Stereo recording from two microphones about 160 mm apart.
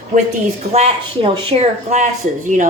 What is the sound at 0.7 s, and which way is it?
A woman's voice, 40° right (ahead or behind).